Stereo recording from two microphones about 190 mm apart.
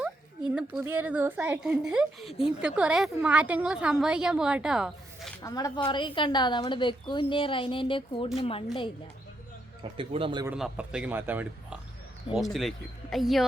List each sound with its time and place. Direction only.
0.9 s a woman's voice: 10° right (ahead or behind)
5.4 s a woman's voice: 20° left (ahead or behind)
10.0 s speech: 30° right (ahead or behind)
10.4 s a woman's voice: 5° right (ahead or behind)
12.3 s a woman's voice: centre (ahead or behind)